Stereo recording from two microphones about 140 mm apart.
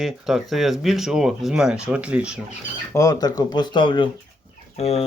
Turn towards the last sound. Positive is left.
turn(degrees=50)  # may be behind; listen again after turning